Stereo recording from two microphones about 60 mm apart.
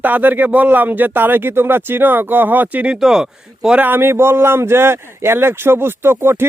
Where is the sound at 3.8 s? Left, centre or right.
Right.